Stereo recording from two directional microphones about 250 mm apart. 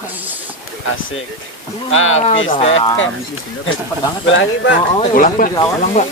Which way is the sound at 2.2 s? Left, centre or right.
Left.